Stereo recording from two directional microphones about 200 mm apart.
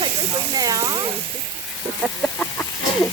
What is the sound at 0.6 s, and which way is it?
Speech, 20° right (ahead or behind).